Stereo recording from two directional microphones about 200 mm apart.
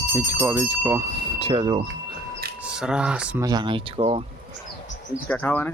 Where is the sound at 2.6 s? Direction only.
5° right (ahead or behind).